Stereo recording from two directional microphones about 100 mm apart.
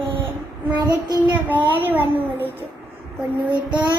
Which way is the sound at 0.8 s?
45° right (ahead or behind).